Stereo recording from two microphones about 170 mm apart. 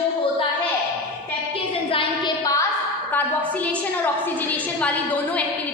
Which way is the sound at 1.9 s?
30° left (ahead or behind).